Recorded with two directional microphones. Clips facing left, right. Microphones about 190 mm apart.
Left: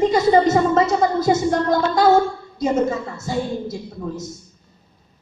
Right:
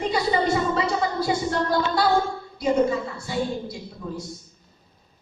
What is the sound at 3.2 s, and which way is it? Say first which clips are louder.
A woman's voice: left 3 dB; 45° left (ahead or behind).